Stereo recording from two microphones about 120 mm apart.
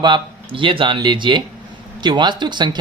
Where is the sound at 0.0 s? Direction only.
40° right (ahead or behind).